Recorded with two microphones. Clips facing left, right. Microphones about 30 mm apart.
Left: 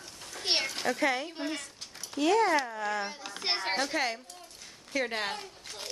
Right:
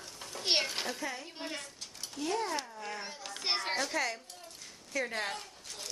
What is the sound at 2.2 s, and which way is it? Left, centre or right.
Speech, left.